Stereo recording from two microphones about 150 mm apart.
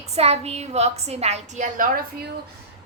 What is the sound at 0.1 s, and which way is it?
A woman's voice, 45° right (ahead or behind).